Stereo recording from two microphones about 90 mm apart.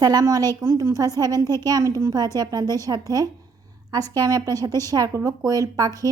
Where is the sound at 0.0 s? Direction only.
45° right (ahead or behind).